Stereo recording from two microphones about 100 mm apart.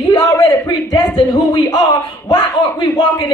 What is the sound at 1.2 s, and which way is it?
Speech, 45° left (ahead or behind).